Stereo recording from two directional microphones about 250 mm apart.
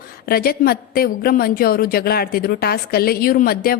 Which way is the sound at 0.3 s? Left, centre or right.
Left.